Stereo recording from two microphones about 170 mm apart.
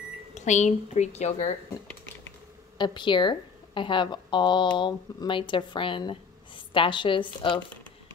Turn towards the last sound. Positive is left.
turn(degrees=30)  # may be behind; listen again after turning